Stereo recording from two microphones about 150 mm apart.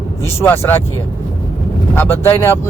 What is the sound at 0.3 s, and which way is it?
Speech, 15° left (ahead or behind).